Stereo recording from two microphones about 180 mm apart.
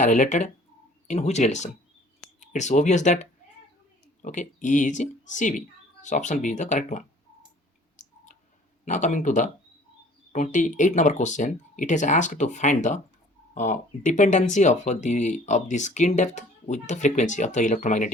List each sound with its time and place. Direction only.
0.0 s speech: 45° left (ahead or behind)
7.9 s clicking: 45° left (ahead or behind)
8.8 s speech: 45° left (ahead or behind)